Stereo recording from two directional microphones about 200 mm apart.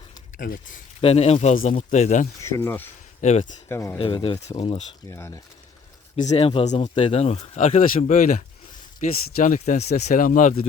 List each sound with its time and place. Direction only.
0.3 s speech: 45° left (ahead or behind)
1.0 s speech: 30° left (ahead or behind)
2.4 s speech: 10° left (ahead or behind)
3.2 s speech: 35° left (ahead or behind)
3.7 s speech: 15° left (ahead or behind)
3.9 s speech: 25° left (ahead or behind)
5.0 s speech: 15° left (ahead or behind)
6.1 s speech: 35° left (ahead or behind)